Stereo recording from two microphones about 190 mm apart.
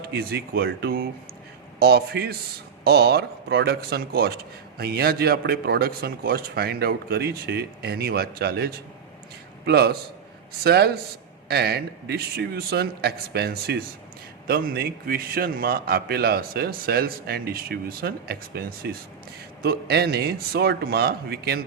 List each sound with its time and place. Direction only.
0.1 s a man's voice: 55° right (ahead or behind)